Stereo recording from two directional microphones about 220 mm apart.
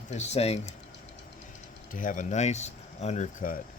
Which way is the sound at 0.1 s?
30° left (ahead or behind).